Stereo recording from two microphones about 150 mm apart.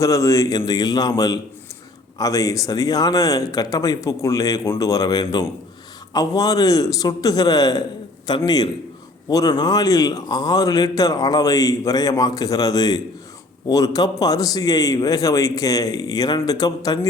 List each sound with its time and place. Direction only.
0.0 s a man's voice: 20° left (ahead or behind)